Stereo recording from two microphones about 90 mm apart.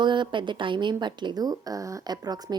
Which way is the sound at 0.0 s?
60° right (ahead or behind).